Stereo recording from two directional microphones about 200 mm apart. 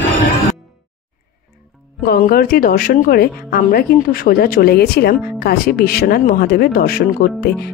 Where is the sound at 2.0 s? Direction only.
50° left (ahead or behind).